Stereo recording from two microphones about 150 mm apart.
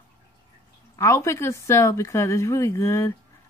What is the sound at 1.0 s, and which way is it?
Speech, 20° left (ahead or behind).